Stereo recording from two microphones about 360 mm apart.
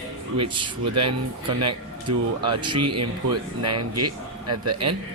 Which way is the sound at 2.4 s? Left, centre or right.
Centre.